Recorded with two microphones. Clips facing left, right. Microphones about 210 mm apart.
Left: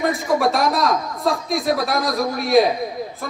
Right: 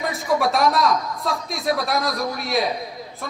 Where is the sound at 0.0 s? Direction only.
Centre (ahead or behind).